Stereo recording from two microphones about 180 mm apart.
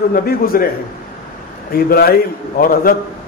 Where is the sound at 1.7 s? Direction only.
60° left (ahead or behind).